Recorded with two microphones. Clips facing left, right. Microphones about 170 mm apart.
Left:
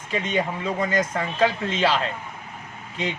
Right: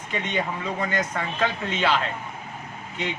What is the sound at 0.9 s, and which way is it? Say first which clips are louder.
Speech: left 3 dB; 30° left (ahead or behind).